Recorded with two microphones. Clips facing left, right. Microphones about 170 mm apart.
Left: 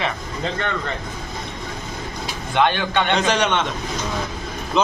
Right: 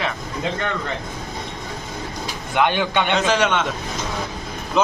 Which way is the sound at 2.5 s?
10° right (ahead or behind).